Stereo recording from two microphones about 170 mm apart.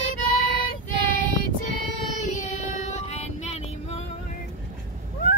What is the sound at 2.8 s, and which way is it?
Music, 40° left (ahead or behind).